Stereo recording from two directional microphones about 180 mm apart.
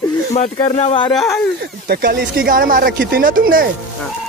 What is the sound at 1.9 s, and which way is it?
Speech, 55° right (ahead or behind).